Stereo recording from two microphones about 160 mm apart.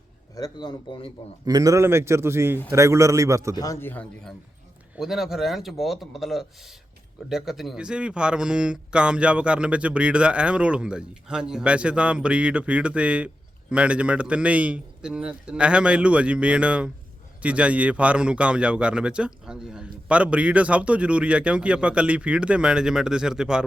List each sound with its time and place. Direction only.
0.3 s speech: 25° left (ahead or behind)
1.5 s a man's voice: 20° right (ahead or behind)
3.5 s a man's voice: 20° left (ahead or behind); by 23.6 s 5° right (ahead or behind)